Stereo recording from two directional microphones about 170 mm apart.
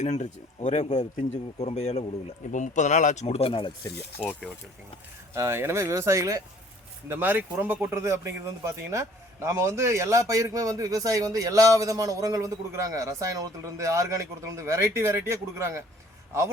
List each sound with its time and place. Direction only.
0.0 s a man's voice: 45° left (ahead or behind)
4.2 s speech: 5° left (ahead or behind)
5.3 s speech: 15° right (ahead or behind)